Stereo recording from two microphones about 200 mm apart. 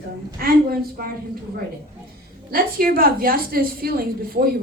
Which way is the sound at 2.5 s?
45° right (ahead or behind).